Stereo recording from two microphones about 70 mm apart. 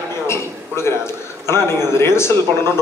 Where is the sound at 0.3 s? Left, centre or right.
Left.